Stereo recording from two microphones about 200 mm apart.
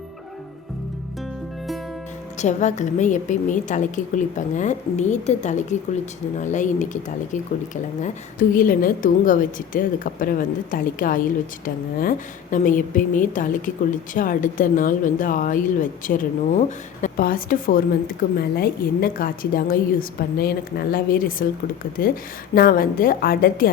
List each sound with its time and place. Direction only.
2.4 s a woman's voice: 35° left (ahead or behind)
8.0 s a woman's voice: 45° left (ahead or behind)